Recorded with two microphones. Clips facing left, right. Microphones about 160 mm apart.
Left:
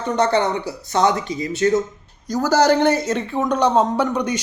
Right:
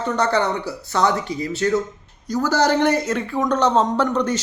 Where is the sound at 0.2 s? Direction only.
20° left (ahead or behind).